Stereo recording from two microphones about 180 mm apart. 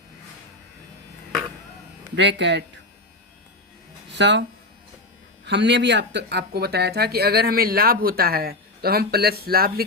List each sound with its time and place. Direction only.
2.1 s speech: 75° right (ahead or behind)
4.1 s speech: 75° right (ahead or behind)
5.5 s speech: 75° right (ahead or behind); by 9.8 s 55° right (ahead or behind)